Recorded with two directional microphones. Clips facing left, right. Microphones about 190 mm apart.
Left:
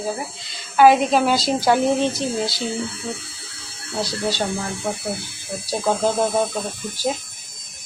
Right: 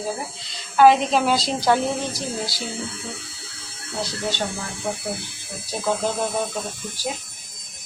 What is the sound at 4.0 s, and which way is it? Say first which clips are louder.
Speech: left 3 dB; 35° left (ahead or behind).